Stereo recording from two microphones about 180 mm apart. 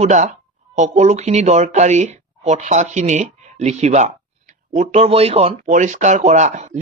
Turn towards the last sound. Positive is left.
turn(degrees=-40)  # may be behind; listen again after turning